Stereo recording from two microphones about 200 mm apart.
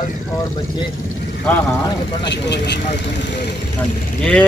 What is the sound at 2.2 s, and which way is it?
Speech, 60° left (ahead or behind).